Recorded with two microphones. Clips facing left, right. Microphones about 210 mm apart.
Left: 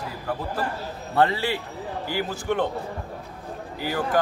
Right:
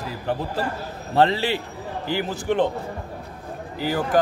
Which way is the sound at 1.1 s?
25° right (ahead or behind).